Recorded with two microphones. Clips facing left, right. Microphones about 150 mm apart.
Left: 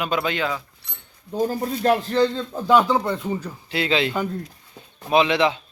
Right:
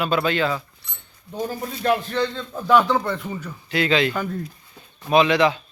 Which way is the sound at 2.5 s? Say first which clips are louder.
Right 4 dB; 20° left (ahead or behind).